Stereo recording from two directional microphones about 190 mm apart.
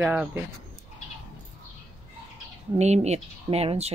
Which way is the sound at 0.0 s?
10° right (ahead or behind).